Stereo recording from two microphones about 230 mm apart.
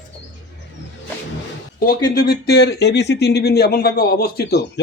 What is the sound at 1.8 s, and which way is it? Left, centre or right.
Speech, left.